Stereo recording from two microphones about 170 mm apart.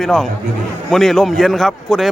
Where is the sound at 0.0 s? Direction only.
5° left (ahead or behind).